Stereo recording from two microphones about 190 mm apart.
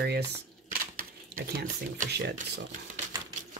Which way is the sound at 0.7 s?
50° right (ahead or behind).